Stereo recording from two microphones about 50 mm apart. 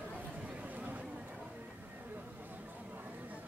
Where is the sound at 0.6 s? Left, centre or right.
Right.